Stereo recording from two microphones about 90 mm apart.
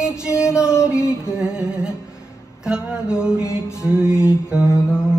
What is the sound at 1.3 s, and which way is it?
Music, 10° right (ahead or behind).